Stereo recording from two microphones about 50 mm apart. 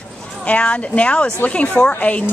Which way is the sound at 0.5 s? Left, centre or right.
Left.